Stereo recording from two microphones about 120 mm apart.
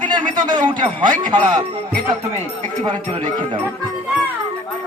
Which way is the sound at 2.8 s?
40° right (ahead or behind).